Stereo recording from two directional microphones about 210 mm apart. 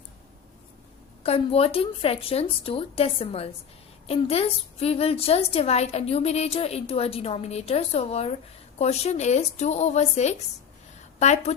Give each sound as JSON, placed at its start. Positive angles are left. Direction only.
{"t": 1.2, "sound": "a woman's voice", "side_deg": 30}